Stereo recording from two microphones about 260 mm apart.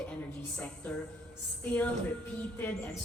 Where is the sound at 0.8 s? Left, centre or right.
Centre.